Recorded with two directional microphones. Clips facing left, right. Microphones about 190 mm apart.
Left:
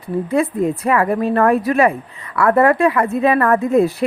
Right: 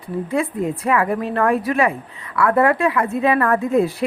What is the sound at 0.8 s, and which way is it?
A woman's voice, 40° left (ahead or behind).